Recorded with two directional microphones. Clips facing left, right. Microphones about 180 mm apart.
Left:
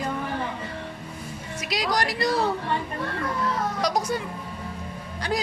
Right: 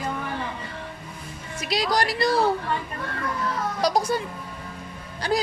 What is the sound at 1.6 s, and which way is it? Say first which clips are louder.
Speech: right 2 dB; 30° right (ahead or behind).